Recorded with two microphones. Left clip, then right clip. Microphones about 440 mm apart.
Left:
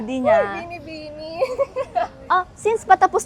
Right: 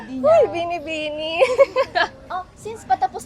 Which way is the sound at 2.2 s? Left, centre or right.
Centre.